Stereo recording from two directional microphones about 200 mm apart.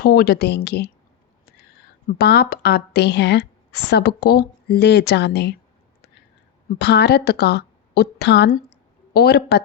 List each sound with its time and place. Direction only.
0.0 s a woman's voice: 50° left (ahead or behind)
2.0 s a woman's voice: 55° left (ahead or behind)
6.7 s a woman's voice: 55° left (ahead or behind)